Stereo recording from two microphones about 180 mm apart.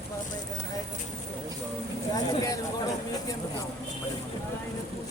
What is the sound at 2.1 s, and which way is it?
Speech, 20° left (ahead or behind).